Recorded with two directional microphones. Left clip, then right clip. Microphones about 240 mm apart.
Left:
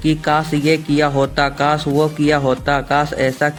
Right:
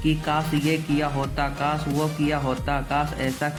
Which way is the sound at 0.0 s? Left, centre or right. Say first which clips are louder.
Left 8 dB; left.